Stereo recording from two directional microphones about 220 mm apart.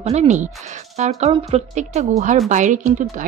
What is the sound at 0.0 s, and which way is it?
Speech, 30° right (ahead or behind).